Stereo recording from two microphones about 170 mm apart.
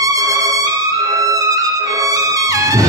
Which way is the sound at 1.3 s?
20° right (ahead or behind).